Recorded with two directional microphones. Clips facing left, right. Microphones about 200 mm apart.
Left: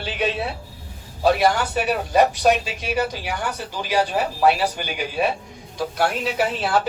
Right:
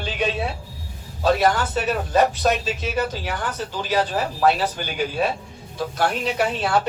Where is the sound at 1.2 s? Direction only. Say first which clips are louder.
Left 1 dB; 10° left (ahead or behind).